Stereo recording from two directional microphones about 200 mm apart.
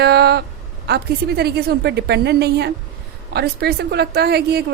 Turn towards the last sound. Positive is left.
turn(degrees=-55)  # may be behind; listen again after turning